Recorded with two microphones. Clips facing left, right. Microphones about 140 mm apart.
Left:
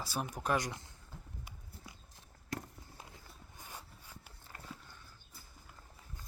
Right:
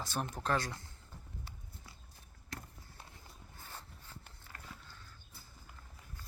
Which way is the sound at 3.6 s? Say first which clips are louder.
Left 1 dB; 15° left (ahead or behind).